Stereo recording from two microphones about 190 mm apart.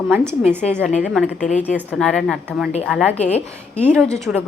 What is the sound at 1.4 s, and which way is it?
Speech, 40° left (ahead or behind).